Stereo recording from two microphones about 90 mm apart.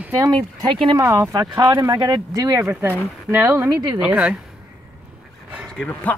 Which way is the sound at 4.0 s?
10° right (ahead or behind).